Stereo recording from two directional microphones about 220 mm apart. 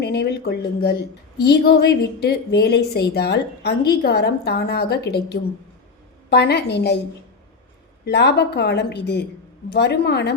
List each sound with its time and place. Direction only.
0.0 s a woman's voice: 50° left (ahead or behind)
8.0 s a woman's voice: 50° left (ahead or behind)